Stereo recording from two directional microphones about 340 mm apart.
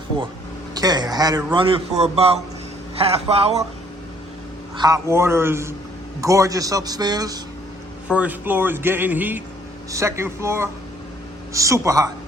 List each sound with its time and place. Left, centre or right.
0.7 s a man's voice: centre
4.8 s a man's voice: centre